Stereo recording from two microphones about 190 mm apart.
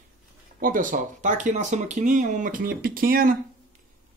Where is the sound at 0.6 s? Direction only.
45° right (ahead or behind).